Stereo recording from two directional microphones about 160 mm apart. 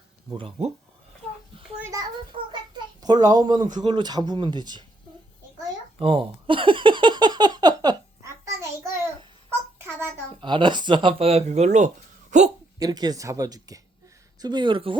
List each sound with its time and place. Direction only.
0.3 s speech: 35° right (ahead or behind)
1.8 s a child's voice: 20° right (ahead or behind)
2.5 s a sound: 25° right (ahead or behind)
3.8 s speech: 25° right (ahead or behind)
6.0 s a sound: 35° right (ahead or behind); by 10.1 s 15° right (ahead or behind)
10.4 s a woman's voice: 30° right (ahead or behind); by 12.5 s 50° right (ahead or behind)
12.8 s speech: 25° right (ahead or behind)